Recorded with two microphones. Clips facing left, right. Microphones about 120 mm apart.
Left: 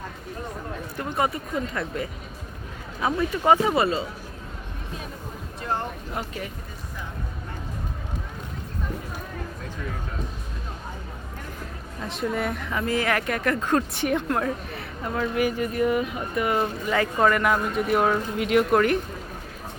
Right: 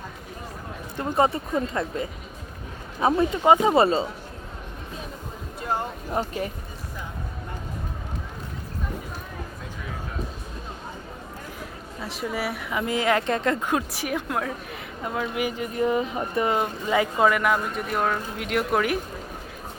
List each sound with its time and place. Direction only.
0.9 s speech: 25° right (ahead or behind)
6.2 s speech: 30° right (ahead or behind)
12.0 s speech: centre (ahead or behind); by 16.6 s 30° right (ahead or behind)
16.6 s speech: 15° right (ahead or behind)